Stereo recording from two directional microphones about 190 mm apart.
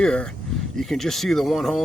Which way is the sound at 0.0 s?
5° left (ahead or behind).